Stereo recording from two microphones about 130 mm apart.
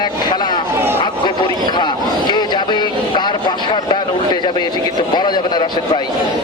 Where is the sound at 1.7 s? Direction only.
35° left (ahead or behind).